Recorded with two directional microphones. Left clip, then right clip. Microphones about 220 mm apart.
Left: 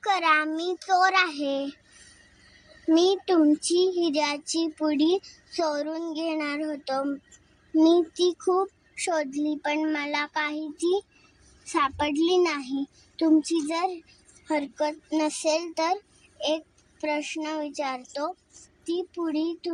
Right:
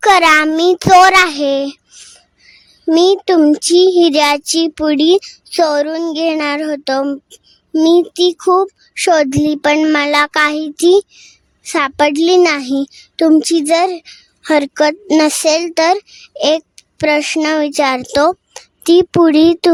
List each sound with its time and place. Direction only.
0.0 s a child's voice: 50° right (ahead or behind)
2.9 s a child's voice: 50° right (ahead or behind)